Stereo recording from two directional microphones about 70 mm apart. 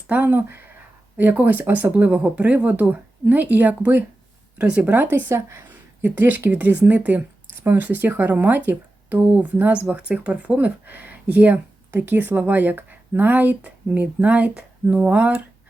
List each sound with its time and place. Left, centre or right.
0.1 s speech: right
5.1 s a woman's voice: right
6.1 s speech: right